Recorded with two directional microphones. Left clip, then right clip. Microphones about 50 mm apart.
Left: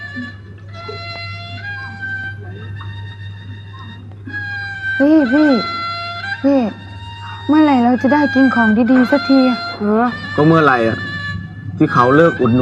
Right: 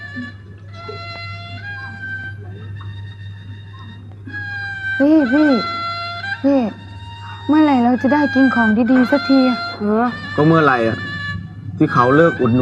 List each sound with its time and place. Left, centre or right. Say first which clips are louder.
0.0 s music: left 2 dB; left
0.8 s violin: left 2 dB; left
4.3 s cat: left 2 dB; left
11.8 s speech: left 2 dB; left